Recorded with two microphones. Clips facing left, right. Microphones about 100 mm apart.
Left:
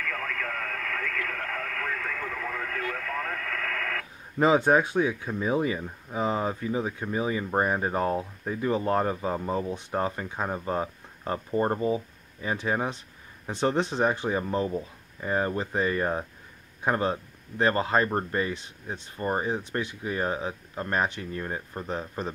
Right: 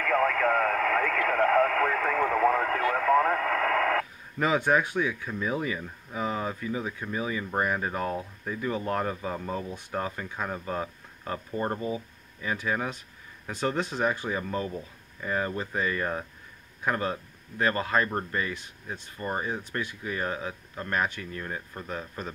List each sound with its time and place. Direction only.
0.0 s radio: 55° right (ahead or behind)
2.8 s radio: 35° right (ahead or behind)
4.4 s speech: 25° left (ahead or behind)